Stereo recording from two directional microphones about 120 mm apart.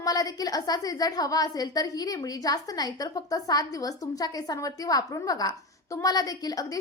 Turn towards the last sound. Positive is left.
turn(degrees=30)  # may be behind; listen again after turning